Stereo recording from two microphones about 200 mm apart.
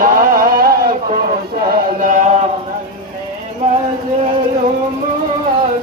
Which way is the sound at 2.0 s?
40° right (ahead or behind).